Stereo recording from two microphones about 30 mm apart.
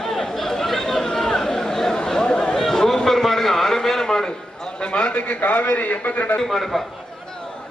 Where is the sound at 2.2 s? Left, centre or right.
Left.